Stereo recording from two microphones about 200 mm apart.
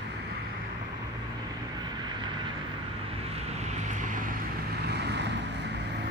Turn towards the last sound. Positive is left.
turn(degrees=-60)  # may be behind; listen again after turning